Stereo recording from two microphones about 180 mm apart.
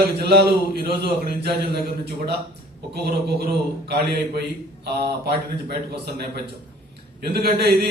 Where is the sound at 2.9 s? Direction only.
60° right (ahead or behind).